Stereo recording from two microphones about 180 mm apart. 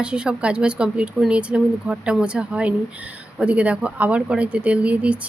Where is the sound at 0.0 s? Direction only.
5° right (ahead or behind).